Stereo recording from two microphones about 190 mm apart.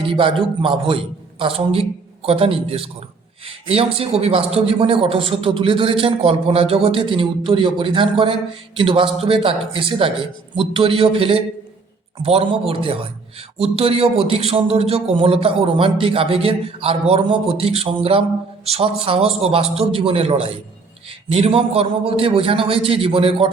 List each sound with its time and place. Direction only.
0.0 s a man's voice: 25° right (ahead or behind)